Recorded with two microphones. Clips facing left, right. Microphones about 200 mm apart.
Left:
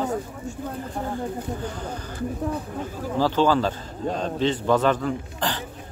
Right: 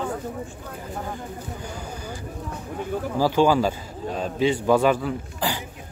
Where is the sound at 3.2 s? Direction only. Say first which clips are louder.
Right 1 dB; 10° right (ahead or behind).